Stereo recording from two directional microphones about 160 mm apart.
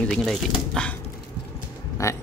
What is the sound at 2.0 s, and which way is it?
Speech, 20° left (ahead or behind).